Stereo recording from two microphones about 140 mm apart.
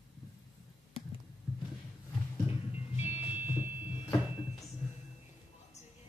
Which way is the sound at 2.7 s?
45° left (ahead or behind).